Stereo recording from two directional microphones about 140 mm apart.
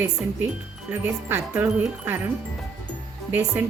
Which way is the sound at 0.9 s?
15° right (ahead or behind).